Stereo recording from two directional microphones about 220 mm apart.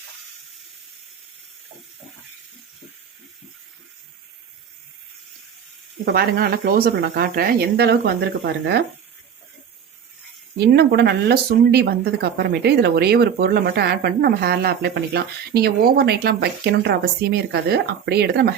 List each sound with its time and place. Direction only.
6.1 s speech: 45° right (ahead or behind)
10.7 s speech: 45° right (ahead or behind)